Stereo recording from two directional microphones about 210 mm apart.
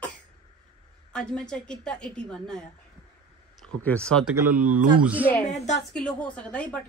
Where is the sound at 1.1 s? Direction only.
5° left (ahead or behind).